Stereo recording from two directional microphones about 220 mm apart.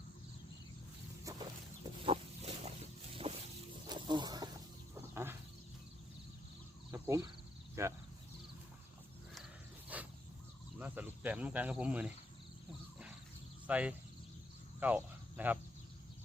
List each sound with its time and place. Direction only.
1.2 s a sound: 15° right (ahead or behind)
2.0 s pig: 30° right (ahead or behind)
3.2 s vehicle: 25° right (ahead or behind)
3.8 s wild animals: 20° right (ahead or behind)
4.9 s insect: 10° right (ahead or behind)
6.9 s a sound: 15° right (ahead or behind)
9.9 s a sound: 5° right (ahead or behind)
10.8 s speech: 5° right (ahead or behind)
13.7 s speech: 5° right (ahead or behind)
14.8 s cricket: 10° right (ahead or behind)